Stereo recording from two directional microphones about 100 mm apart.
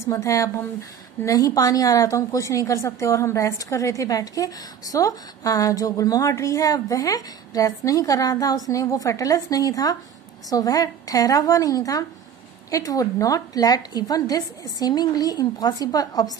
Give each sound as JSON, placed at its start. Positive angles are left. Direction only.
{"t": 0.0, "sound": "a woman's voice", "side_deg": 30}